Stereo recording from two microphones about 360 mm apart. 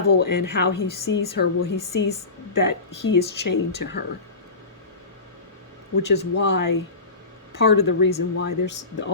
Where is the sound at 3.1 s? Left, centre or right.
Left.